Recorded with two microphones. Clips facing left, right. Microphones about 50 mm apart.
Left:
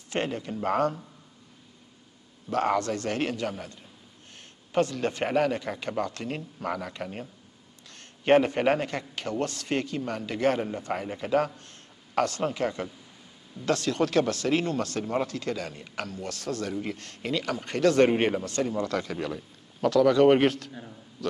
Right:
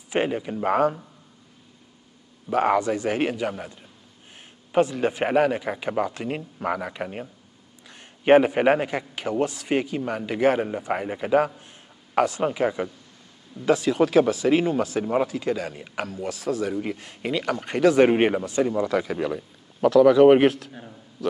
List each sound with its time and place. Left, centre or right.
0.1 s speech: centre
2.5 s speech: centre
4.7 s speech: centre